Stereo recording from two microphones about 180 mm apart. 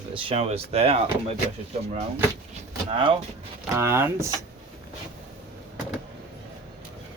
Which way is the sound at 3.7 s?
15° right (ahead or behind).